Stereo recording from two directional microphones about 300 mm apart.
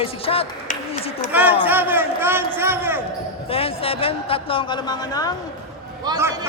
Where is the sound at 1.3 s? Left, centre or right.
Centre.